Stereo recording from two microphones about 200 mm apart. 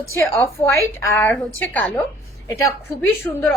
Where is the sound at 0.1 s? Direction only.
15° left (ahead or behind).